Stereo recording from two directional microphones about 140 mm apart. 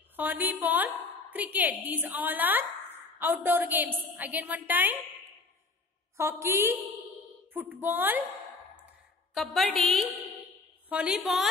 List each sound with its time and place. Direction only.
0.1 s a woman's voice: 15° right (ahead or behind)
6.1 s a woman's voice: 20° right (ahead or behind)
9.3 s a woman's voice: centre (ahead or behind)
10.9 s a woman's voice: 10° right (ahead or behind)